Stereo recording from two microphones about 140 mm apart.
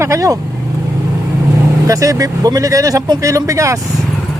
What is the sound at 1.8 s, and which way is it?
A man's voice, 25° right (ahead or behind).